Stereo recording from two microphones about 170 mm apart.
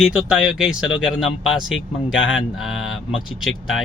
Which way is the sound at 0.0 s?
5° right (ahead or behind).